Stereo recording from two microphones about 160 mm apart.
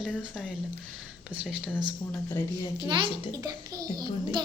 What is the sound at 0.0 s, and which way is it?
A woman's voice, centre (ahead or behind).